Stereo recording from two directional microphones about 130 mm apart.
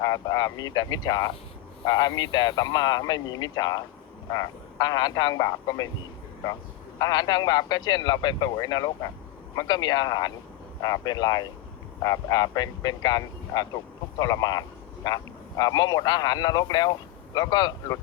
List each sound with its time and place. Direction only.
0.0 s a man's voice: 30° left (ahead or behind)
7.0 s a man's voice: 30° left (ahead or behind)